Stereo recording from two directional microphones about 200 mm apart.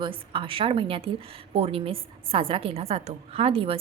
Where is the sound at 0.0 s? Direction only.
25° right (ahead or behind).